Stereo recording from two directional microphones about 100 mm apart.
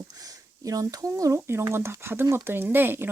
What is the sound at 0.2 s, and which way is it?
Speech, 35° right (ahead or behind).